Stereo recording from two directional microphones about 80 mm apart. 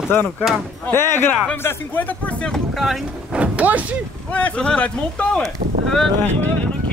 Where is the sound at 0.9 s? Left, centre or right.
Left.